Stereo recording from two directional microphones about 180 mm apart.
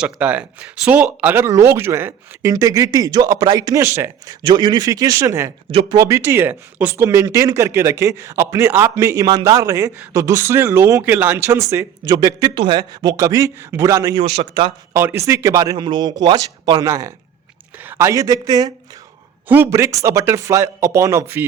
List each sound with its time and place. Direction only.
0.0 s speech: 5° right (ahead or behind)
14.2 s speech: 30° right (ahead or behind)
14.9 s speech: 15° right (ahead or behind)